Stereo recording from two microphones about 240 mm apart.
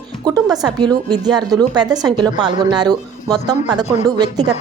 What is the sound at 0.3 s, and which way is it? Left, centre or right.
Speech, centre.